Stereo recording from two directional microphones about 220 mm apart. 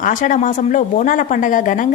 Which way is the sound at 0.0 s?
35° left (ahead or behind).